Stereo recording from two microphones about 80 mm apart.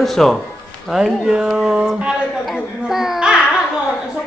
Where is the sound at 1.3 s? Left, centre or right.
Centre.